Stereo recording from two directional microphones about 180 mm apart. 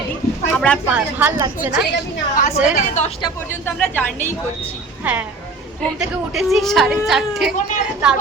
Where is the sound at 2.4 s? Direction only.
45° left (ahead or behind).